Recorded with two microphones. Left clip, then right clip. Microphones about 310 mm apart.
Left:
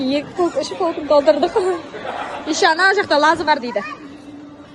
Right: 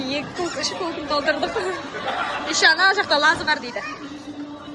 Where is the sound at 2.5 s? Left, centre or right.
Centre.